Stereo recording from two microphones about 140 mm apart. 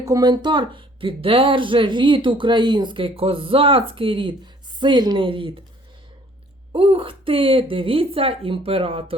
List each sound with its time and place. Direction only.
0.0 s speech: 25° right (ahead or behind)
6.7 s speech: 40° right (ahead or behind)